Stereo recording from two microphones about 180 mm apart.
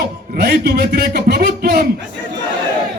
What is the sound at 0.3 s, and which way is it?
A man's voice, 65° right (ahead or behind).